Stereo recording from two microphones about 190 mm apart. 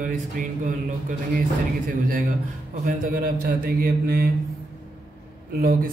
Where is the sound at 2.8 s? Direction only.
45° right (ahead or behind).